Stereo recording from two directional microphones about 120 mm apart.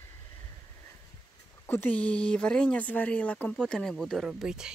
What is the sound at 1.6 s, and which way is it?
Speech, 15° left (ahead or behind).